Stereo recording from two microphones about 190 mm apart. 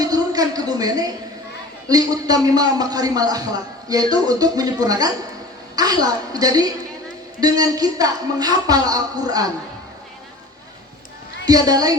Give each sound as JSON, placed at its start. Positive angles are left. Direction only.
{"t": 0.0, "sound": "a sound", "side_deg": -20}
{"t": 1.9, "sound": "speech", "side_deg": -20}
{"t": 11.4, "sound": "speech", "side_deg": -20}